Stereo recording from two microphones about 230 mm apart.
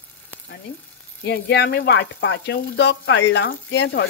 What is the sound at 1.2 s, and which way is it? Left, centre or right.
A woman's voice, left.